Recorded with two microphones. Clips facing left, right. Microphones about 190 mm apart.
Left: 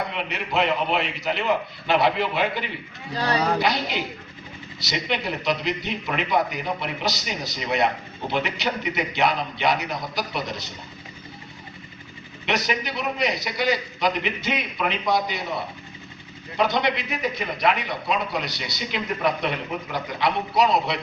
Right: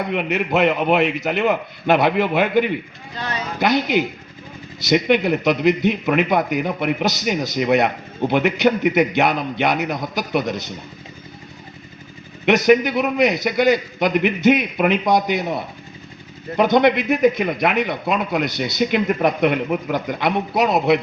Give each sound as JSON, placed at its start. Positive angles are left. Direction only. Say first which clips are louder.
{"t": 0.1, "sound": "a man's voice", "louder": "right 8 dB", "side_deg": -55}
{"t": 3.2, "sound": "speech", "louder": "left 4 dB", "side_deg": 35}
{"t": 3.6, "sound": "a man's voice", "louder": "right 7 dB", "side_deg": -50}
{"t": 12.5, "sound": "a man's voice", "louder": "right 12 dB", "side_deg": -50}
{"t": 16.6, "sound": "a man's voice", "louder": "right 8 dB", "side_deg": -50}